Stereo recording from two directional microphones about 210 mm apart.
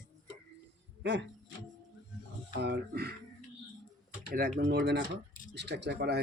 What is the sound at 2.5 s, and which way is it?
Speech, 55° right (ahead or behind).